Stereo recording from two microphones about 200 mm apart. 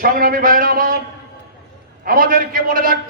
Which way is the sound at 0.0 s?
45° right (ahead or behind).